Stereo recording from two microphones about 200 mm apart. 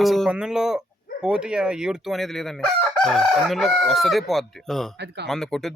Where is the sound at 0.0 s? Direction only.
Centre (ahead or behind).